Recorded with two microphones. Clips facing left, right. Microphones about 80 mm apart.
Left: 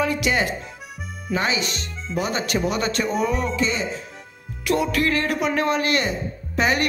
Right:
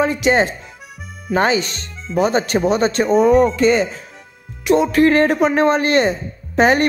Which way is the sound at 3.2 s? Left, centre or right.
Right.